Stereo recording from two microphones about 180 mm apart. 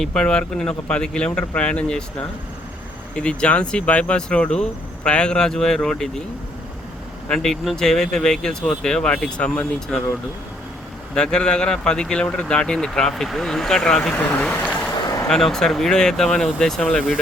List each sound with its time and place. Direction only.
0.0 s speech: 5° left (ahead or behind)
3.2 s speech: 5° left (ahead or behind)
7.3 s speech: 5° left (ahead or behind)
11.1 s speech: 5° left (ahead or behind)